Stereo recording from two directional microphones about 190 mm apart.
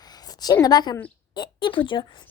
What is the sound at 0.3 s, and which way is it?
A woman's voice, 20° left (ahead or behind).